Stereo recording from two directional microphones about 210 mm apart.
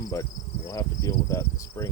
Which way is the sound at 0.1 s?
15° left (ahead or behind).